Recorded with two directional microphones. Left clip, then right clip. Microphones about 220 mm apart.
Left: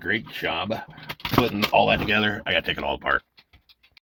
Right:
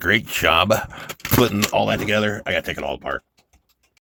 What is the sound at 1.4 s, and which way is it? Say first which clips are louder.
Speech: right 1 dB; 35° right (ahead or behind).